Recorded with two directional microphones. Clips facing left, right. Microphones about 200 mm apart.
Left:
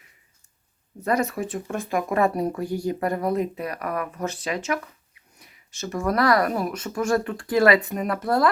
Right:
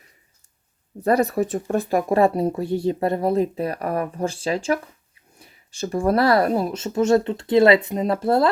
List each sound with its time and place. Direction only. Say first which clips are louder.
1.0 s speech: right 5 dB; 35° right (ahead or behind)